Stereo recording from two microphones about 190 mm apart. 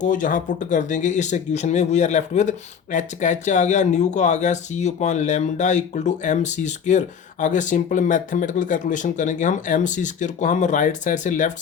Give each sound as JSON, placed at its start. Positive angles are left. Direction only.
{"t": 0.0, "sound": "speech", "side_deg": 45}